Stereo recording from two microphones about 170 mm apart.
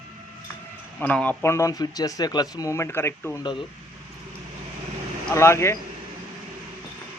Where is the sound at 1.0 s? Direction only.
10° left (ahead or behind).